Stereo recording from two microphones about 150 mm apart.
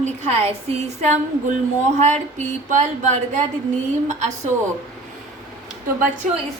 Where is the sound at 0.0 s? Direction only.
45° right (ahead or behind).